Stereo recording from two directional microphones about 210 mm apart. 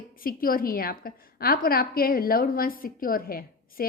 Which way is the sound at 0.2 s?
45° left (ahead or behind).